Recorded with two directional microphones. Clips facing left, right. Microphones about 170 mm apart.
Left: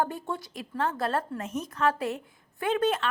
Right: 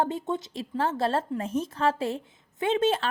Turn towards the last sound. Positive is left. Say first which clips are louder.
# right 2 dB
turn(degrees=-25)  # may be behind; listen again after turning